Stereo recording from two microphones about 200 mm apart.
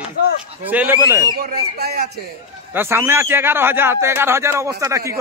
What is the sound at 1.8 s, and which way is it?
Speech, 55° right (ahead or behind).